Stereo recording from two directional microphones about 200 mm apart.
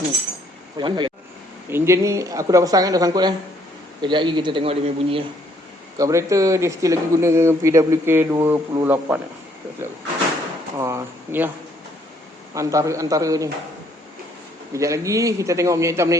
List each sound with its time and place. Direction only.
0.8 s a man's voice: 25° right (ahead or behind)
6.0 s speech: 15° right (ahead or behind)
10.8 s speech: 15° right (ahead or behind)
12.5 s speech: 15° right (ahead or behind)
14.7 s speech: 15° right (ahead or behind)